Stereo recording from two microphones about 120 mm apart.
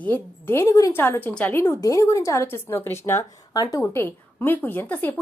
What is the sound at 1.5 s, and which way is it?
Speech, 20° left (ahead or behind).